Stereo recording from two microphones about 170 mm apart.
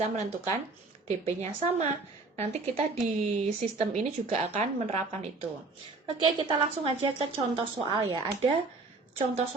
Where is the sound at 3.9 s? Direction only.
40° right (ahead or behind).